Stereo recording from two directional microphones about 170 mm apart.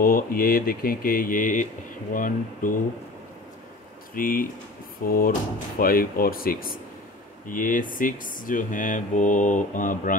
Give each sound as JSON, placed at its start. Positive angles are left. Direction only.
{"t": 0.0, "sound": "speech", "side_deg": 60}
{"t": 4.1, "sound": "speech", "side_deg": 55}